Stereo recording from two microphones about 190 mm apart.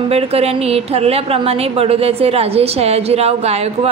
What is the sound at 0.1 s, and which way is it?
A woman's voice, 30° right (ahead or behind).